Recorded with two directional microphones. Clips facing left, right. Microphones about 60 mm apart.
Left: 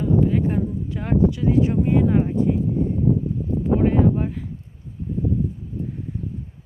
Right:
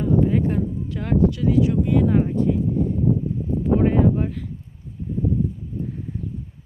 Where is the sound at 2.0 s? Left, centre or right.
Centre.